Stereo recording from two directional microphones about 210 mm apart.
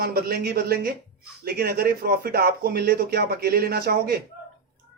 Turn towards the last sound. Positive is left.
turn(degrees=-50)  # may be behind; listen again after turning